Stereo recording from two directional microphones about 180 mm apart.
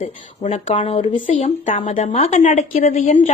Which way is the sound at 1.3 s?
45° left (ahead or behind).